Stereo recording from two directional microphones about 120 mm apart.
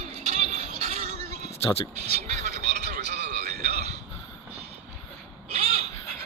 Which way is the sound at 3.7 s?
75° right (ahead or behind).